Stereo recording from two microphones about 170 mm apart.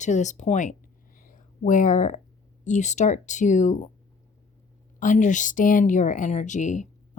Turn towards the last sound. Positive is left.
turn(degrees=45)  # may be behind; listen again after turning